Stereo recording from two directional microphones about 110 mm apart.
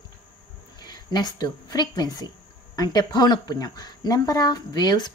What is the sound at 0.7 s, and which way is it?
A woman's voice, 40° left (ahead or behind).